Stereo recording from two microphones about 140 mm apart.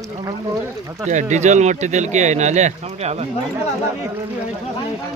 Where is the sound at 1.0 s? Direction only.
60° right (ahead or behind).